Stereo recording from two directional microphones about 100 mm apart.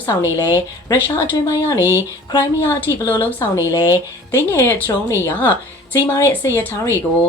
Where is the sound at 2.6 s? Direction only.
20° left (ahead or behind).